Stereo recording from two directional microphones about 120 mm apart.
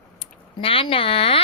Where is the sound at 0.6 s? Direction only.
50° left (ahead or behind).